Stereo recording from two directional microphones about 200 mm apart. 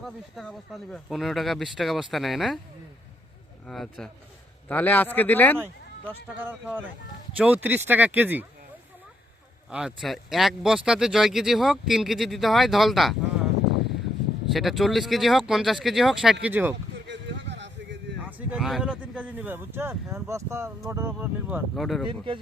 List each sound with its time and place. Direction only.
0.0 s speech: centre (ahead or behind)
3.7 s speech: centre (ahead or behind)
6.4 s speech: 10° right (ahead or behind)
9.6 s speech: 5° right (ahead or behind)
14.5 s speech: centre (ahead or behind)
17.1 s a sound: 60° right (ahead or behind)
18.3 s speech: 5° right (ahead or behind)
21.8 s speech: centre (ahead or behind)
22.0 s speech: 25° right (ahead or behind)